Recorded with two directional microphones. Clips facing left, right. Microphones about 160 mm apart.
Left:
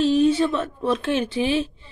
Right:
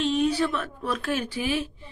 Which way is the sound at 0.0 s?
30° left (ahead or behind).